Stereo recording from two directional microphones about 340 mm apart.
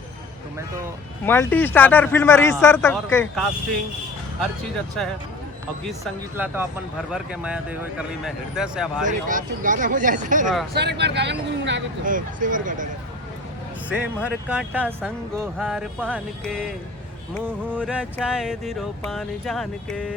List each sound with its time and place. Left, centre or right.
1.2 s speech: centre
5.8 s speech: centre
9.2 s speech: right
13.9 s speech: centre